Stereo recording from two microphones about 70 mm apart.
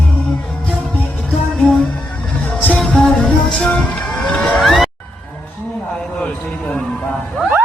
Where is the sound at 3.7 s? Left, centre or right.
Centre.